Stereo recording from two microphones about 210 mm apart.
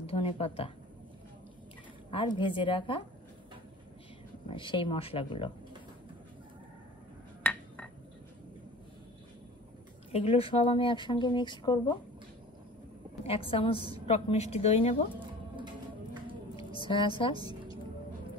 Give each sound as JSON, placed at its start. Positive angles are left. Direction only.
{"t": 0.0, "sound": "speech", "side_deg": 25}
{"t": 2.0, "sound": "a woman's voice", "side_deg": 25}
{"t": 4.5, "sound": "a woman's voice", "side_deg": 25}
{"t": 7.4, "sound": "chink", "side_deg": 5}
{"t": 10.1, "sound": "a woman's voice", "side_deg": 30}
{"t": 13.2, "sound": "a woman's voice", "side_deg": 30}
{"t": 15.5, "sound": "music", "side_deg": -20}
{"t": 16.5, "sound": "a sound", "side_deg": 25}